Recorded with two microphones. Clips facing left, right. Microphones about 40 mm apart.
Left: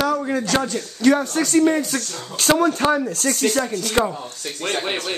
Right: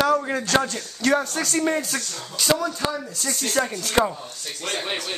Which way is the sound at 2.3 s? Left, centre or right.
Left.